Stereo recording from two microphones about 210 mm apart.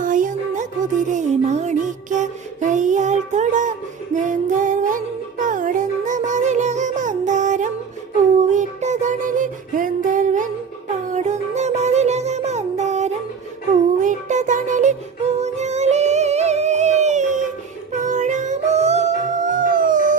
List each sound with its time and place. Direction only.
0.0 s music: 40° right (ahead or behind)